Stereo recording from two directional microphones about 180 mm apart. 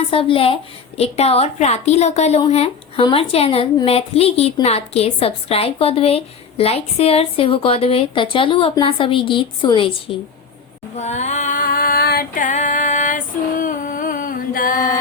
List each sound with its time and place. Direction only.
0.1 s a woman's voice: 30° left (ahead or behind)
10.9 s female singing: 40° left (ahead or behind)